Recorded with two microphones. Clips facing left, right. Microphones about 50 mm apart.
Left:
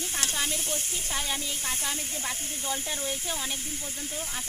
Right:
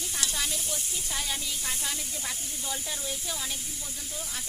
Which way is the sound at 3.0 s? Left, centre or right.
Left.